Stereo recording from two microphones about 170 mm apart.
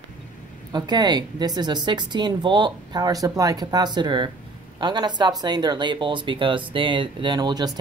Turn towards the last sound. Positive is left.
turn(degrees=-25)  # may be behind; listen again after turning